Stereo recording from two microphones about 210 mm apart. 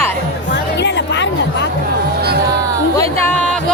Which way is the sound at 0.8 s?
55° left (ahead or behind).